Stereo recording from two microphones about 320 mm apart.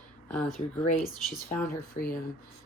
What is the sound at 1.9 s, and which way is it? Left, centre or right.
Speech, left.